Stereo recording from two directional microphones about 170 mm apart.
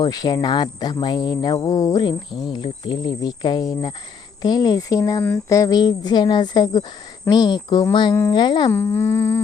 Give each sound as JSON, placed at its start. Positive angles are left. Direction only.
{"t": 0.0, "sound": "cricket", "side_deg": 25}
{"t": 8.7, "sound": "speech", "side_deg": 15}